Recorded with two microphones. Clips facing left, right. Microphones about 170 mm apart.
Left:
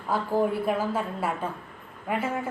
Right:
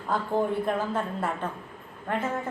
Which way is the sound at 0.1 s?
5° left (ahead or behind).